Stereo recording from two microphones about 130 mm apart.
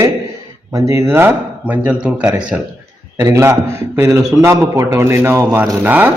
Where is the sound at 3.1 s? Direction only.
20° right (ahead or behind).